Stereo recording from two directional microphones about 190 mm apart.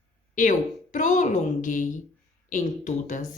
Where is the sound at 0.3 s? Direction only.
45° left (ahead or behind).